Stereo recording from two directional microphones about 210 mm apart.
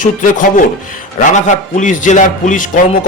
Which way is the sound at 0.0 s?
40° left (ahead or behind).